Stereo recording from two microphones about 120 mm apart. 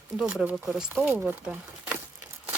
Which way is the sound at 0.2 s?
5° right (ahead or behind).